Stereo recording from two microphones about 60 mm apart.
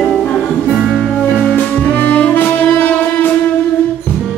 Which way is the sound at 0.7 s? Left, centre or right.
Centre.